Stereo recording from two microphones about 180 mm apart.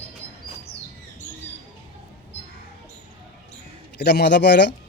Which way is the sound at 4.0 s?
65° left (ahead or behind).